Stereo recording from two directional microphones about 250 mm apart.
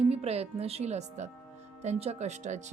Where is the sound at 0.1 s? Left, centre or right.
Right.